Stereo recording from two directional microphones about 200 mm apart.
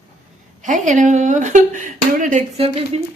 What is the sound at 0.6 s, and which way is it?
A woman's voice, 40° right (ahead or behind).